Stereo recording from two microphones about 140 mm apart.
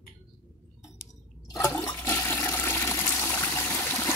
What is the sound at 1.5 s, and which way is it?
Toilet flush, 20° left (ahead or behind).